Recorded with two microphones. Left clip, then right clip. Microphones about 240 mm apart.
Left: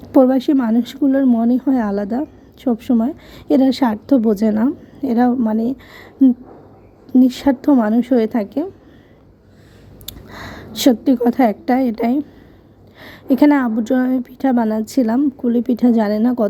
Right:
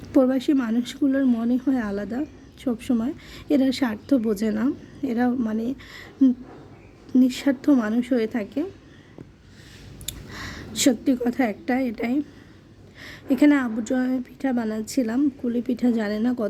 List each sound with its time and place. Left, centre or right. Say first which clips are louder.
0.1 s a woman's voice: left 7 dB; centre
10.1 s a woman's voice: left 3 dB; centre